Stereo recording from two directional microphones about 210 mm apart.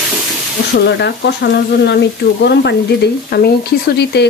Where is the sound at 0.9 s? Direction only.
55° left (ahead or behind).